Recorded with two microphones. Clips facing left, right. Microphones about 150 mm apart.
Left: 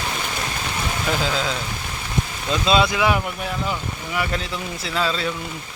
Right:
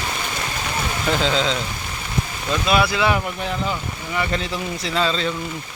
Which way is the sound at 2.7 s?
20° left (ahead or behind).